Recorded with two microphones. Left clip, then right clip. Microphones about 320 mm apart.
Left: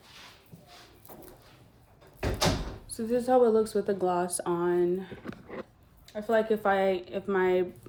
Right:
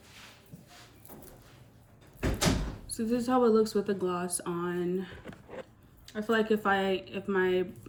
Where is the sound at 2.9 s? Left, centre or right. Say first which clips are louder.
Left 4 dB; centre.